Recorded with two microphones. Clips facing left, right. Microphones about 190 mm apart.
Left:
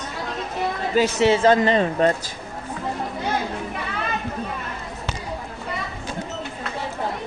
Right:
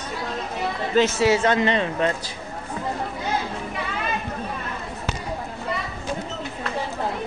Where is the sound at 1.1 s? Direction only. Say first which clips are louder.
Left 2 dB; 25° left (ahead or behind).